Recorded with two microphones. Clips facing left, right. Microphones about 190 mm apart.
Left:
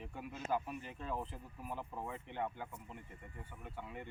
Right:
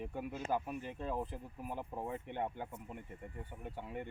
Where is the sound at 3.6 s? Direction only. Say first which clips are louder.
Right 4 dB; 45° right (ahead or behind).